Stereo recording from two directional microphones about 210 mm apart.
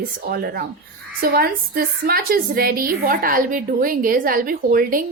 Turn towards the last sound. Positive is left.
turn(degrees=-45)  # may be behind; listen again after turning